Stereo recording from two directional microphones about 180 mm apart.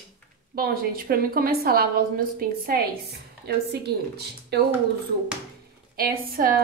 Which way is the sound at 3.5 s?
65° right (ahead or behind).